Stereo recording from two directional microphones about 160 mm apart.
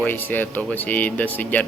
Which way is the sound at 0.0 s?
10° left (ahead or behind).